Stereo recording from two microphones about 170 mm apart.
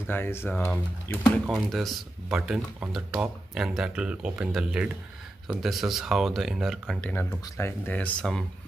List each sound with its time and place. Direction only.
0.1 s speech: 15° left (ahead or behind)
1.4 s speech: centre (ahead or behind)